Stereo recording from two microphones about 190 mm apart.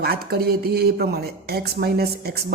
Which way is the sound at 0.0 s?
55° right (ahead or behind).